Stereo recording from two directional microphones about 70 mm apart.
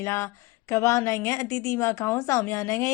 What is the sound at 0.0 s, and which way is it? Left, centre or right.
Speech, left.